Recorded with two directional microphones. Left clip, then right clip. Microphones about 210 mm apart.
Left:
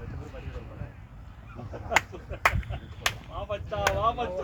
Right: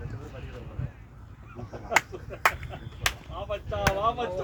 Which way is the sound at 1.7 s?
15° right (ahead or behind).